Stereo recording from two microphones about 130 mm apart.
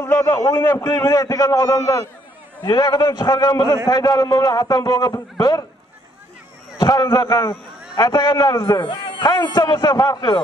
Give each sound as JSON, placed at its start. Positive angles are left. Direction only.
{"t": 0.0, "sound": "a man's voice", "side_deg": 20}
{"t": 6.8, "sound": "a man's voice", "side_deg": 35}
{"t": 8.8, "sound": "a man's voice", "side_deg": 40}